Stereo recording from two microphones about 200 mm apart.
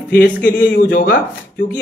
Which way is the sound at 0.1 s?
50° left (ahead or behind).